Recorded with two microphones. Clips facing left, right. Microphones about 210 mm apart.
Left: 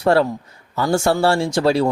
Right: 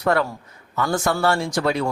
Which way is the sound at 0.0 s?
30° left (ahead or behind).